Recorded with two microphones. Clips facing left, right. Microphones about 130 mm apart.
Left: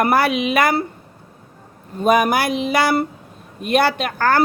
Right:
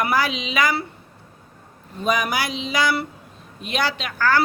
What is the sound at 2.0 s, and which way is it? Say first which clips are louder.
Speech: left 7 dB; 55° left (ahead or behind).